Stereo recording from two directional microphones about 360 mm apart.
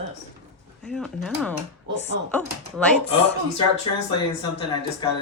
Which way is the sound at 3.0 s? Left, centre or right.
Centre.